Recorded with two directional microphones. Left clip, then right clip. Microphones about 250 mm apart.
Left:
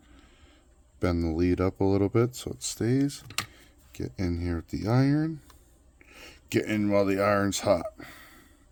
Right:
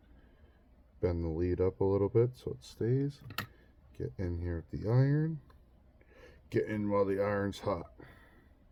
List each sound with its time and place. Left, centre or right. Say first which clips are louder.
0.9 s speech: left 6 dB; left